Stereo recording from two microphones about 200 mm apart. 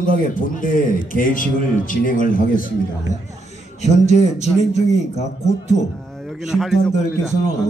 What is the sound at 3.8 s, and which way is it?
A man's voice, 35° left (ahead or behind).